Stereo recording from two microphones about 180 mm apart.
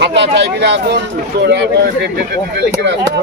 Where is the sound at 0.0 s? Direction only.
70° right (ahead or behind).